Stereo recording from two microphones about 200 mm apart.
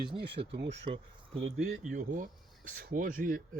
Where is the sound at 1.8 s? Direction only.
40° right (ahead or behind).